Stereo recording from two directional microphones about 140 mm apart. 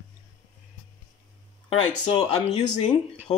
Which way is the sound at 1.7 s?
35° left (ahead or behind).